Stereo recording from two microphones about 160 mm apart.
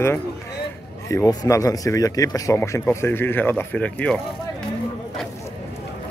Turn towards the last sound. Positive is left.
turn(degrees=10)  # may be behind; listen again after turning